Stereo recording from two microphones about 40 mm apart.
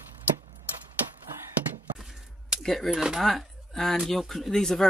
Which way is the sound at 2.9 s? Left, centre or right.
Centre.